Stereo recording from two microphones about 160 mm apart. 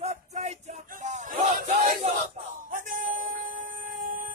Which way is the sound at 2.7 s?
55° right (ahead or behind).